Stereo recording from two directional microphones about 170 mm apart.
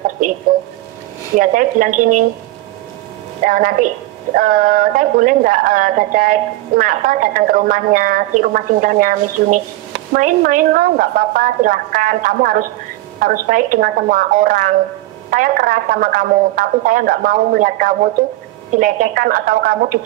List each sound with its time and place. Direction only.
1.3 s speech: 50° right (ahead or behind)
3.4 s a woman's voice: 55° right (ahead or behind)